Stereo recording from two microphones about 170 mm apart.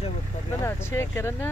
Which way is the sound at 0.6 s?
15° left (ahead or behind).